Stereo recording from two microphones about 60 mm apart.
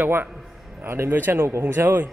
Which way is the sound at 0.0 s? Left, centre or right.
Right.